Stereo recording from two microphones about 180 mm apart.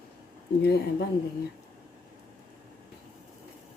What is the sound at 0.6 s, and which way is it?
Speech, 65° left (ahead or behind).